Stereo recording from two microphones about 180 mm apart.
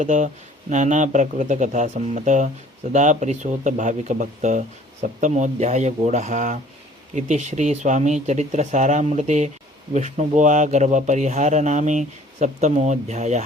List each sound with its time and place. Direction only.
0.0 s speech: 45° right (ahead or behind)